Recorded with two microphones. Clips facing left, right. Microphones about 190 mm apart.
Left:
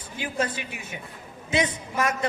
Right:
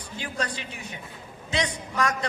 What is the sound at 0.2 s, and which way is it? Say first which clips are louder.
Speech: left 4 dB; 20° left (ahead or behind).